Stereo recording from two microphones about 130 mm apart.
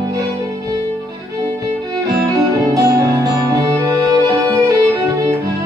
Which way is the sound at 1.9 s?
25° right (ahead or behind).